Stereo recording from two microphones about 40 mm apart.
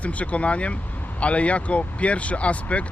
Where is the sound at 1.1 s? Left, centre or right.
Left.